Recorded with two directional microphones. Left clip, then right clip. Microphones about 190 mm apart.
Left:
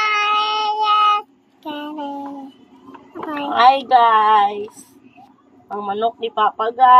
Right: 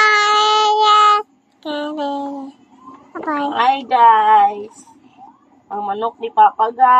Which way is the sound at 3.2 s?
35° right (ahead or behind).